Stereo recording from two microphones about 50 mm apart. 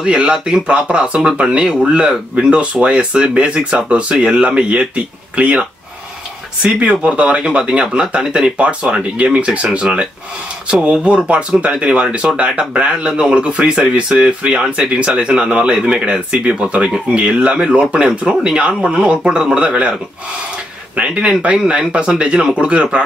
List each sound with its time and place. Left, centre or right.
0.0 s speech: centre